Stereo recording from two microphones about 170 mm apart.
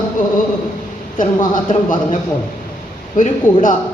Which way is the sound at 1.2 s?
50° left (ahead or behind).